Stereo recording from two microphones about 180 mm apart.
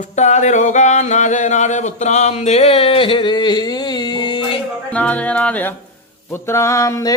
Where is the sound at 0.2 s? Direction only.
40° left (ahead or behind).